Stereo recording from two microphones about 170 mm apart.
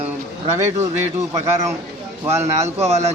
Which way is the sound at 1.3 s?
15° right (ahead or behind).